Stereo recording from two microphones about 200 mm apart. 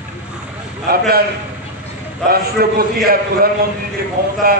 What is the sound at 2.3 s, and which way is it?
A man's voice, 50° right (ahead or behind).